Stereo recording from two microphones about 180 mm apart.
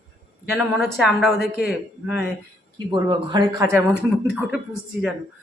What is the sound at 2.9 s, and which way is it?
Speech, 25° right (ahead or behind).